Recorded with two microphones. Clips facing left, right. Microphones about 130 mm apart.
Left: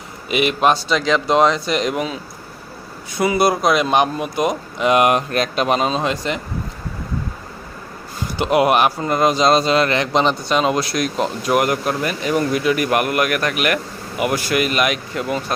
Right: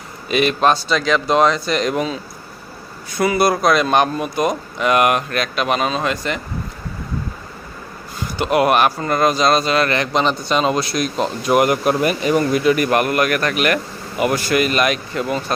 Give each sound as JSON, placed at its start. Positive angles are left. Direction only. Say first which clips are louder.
{"t": 0.3, "sound": "speech", "louder": "right 1 dB", "side_deg": 15}
{"t": 3.2, "sound": "speech", "louder": "even", "side_deg": 20}
{"t": 8.4, "sound": "speech", "louder": "even", "side_deg": 20}
{"t": 10.5, "sound": "speech", "louder": "even", "side_deg": 5}
{"t": 12.3, "sound": "speech", "louder": "right 1 dB", "side_deg": 0}